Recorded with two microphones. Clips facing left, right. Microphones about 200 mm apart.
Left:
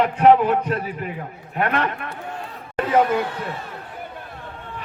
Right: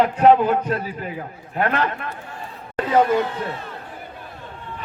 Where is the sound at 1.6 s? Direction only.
35° right (ahead or behind).